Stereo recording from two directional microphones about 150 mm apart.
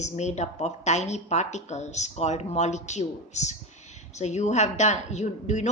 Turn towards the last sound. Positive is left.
turn(degrees=50)  # may be behind; listen again after turning